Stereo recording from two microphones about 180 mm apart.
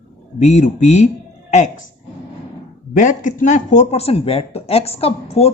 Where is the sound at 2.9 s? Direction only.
45° left (ahead or behind).